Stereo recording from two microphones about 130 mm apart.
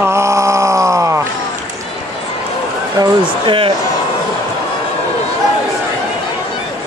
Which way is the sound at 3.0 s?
40° right (ahead or behind).